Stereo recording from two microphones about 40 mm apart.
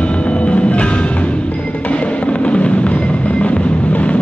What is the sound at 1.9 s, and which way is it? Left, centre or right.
Music, left.